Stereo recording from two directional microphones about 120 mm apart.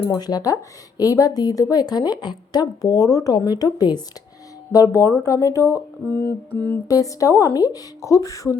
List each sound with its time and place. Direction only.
0.1 s speech: 30° left (ahead or behind); by 6.7 s 15° left (ahead or behind)
6.8 s speech: 30° left (ahead or behind)